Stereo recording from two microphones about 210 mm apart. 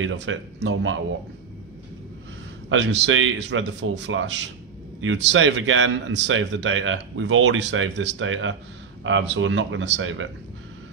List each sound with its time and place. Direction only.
0.0 s a man's voice: 60° right (ahead or behind)
2.7 s a man's voice: 65° right (ahead or behind)